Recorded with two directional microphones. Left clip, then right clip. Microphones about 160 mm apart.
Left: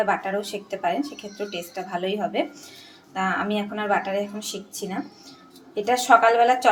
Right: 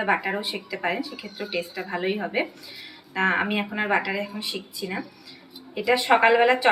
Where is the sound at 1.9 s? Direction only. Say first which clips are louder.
Left 1 dB; 45° left (ahead or behind).